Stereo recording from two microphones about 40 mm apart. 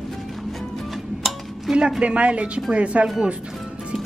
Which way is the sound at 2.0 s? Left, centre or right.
Right.